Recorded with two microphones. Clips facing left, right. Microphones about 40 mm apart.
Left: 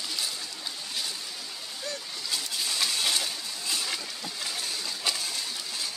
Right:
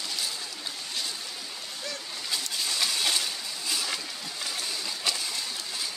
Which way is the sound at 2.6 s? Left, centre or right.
Centre.